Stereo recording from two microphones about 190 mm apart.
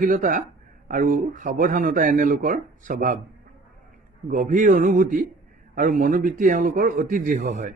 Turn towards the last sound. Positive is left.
turn(degrees=-40)  # may be behind; listen again after turning